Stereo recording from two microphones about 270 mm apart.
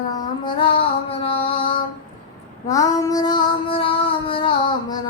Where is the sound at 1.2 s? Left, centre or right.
Centre.